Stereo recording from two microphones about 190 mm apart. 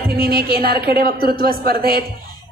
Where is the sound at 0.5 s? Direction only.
50° right (ahead or behind).